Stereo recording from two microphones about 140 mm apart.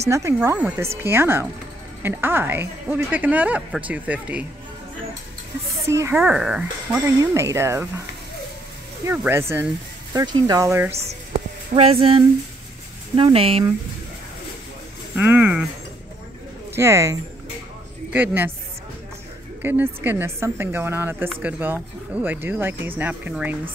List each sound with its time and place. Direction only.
0.1 s a woman's voice: 20° right (ahead or behind)
5.9 s speech: 20° right (ahead or behind)
6.1 s speech: 5° right (ahead or behind)
7.2 s speech: 20° right (ahead or behind)
9.0 s a woman's voice: 15° right (ahead or behind)
10.1 s speech: 30° right (ahead or behind)
10.9 s speech: 45° right (ahead or behind)
15.1 s a woman's voice: 10° right (ahead or behind)
16.7 s a woman's voice: 20° right (ahead or behind)
19.6 s a woman's voice: 15° right (ahead or behind)